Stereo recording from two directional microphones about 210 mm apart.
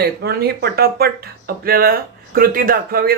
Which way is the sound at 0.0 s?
50° right (ahead or behind).